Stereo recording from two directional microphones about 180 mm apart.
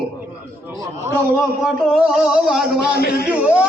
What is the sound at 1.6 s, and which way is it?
A man's voice, centre (ahead or behind).